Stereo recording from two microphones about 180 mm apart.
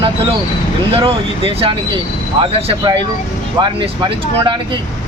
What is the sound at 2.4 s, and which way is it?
Speech, 25° right (ahead or behind).